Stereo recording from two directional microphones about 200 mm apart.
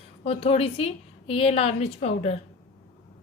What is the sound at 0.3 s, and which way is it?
A woman's voice, 30° left (ahead or behind).